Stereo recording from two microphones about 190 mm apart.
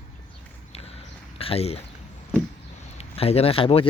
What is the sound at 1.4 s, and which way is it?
Speech, 30° left (ahead or behind).